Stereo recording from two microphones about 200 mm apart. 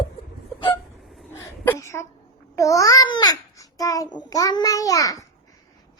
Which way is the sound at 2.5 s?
15° left (ahead or behind).